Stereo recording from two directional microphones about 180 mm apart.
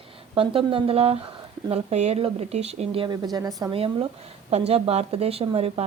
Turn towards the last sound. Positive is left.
turn(degrees=-35)  # may be behind; listen again after turning